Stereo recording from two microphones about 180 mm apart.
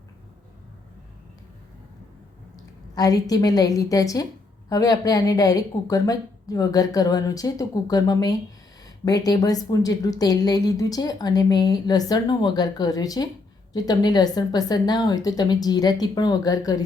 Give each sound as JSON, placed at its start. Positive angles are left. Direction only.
{"t": 2.9, "sound": "a woman's voice", "side_deg": 20}